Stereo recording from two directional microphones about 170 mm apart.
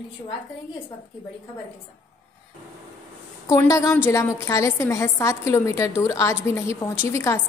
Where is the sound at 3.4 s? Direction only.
20° left (ahead or behind).